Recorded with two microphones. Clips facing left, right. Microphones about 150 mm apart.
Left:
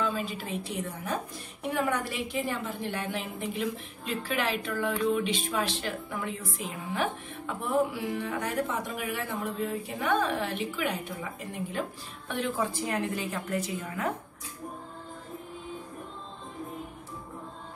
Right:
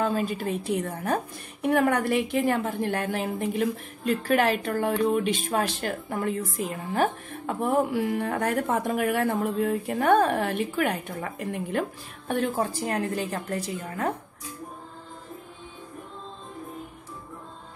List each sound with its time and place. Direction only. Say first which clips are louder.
0.0 s a woman's voice: right 5 dB; 50° right (ahead or behind)
12.3 s a woman's voice: right 4 dB; 45° right (ahead or behind)